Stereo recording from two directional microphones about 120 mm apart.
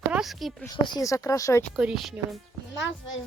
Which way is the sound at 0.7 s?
35° left (ahead or behind).